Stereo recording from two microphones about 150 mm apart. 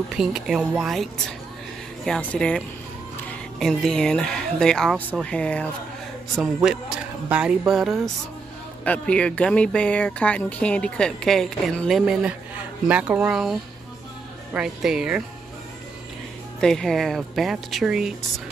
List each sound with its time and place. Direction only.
0.1 s speech: 5° right (ahead or behind)
2.0 s speech: 5° left (ahead or behind)
8.8 s speech: 10° left (ahead or behind)
12.0 s speech: 5° right (ahead or behind)
16.5 s speech: 5° left (ahead or behind)